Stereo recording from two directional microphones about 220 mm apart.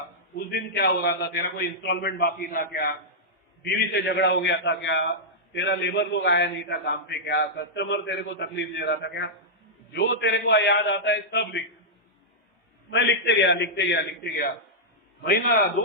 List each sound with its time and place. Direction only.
0.3 s a man's voice: 50° left (ahead or behind)
12.9 s a man's voice: 55° left (ahead or behind)